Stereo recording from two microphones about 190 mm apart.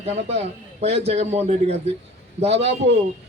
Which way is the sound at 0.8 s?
35° right (ahead or behind).